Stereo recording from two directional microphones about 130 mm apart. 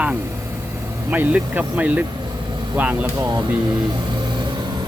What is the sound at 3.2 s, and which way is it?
Speech, 30° right (ahead or behind).